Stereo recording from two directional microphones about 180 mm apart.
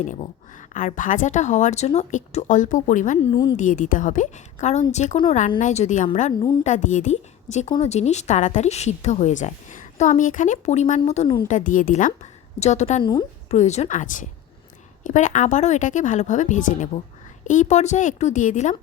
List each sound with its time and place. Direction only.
0.0 s a woman's voice: 45° left (ahead or behind)
3.2 s a woman's voice: 25° left (ahead or behind)
3.6 s a woman's voice: 45° left (ahead or behind)
13.0 s a woman's voice: 25° left (ahead or behind)
13.5 s a woman's voice: 40° left (ahead or behind)